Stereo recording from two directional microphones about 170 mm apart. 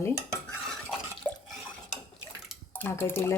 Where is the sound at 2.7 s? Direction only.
10° left (ahead or behind).